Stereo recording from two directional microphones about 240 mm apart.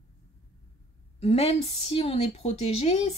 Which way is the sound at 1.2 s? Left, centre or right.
Left.